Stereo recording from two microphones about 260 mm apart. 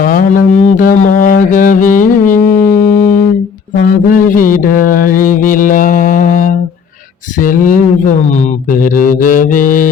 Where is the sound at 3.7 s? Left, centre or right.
Left.